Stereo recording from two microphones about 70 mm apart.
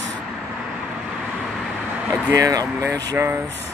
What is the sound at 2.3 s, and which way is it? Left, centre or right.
Speech, right.